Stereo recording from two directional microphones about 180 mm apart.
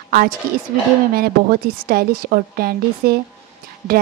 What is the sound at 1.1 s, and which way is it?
A woman's voice, 55° right (ahead or behind).